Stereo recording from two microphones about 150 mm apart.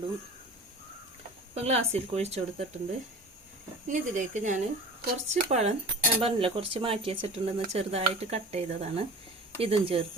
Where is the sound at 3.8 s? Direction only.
55° right (ahead or behind).